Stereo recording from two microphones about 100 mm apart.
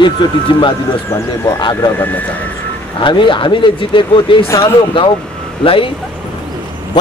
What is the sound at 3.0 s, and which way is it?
Speech, 55° left (ahead or behind).